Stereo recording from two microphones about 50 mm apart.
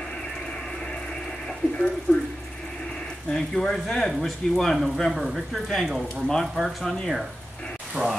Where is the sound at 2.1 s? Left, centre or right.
Left.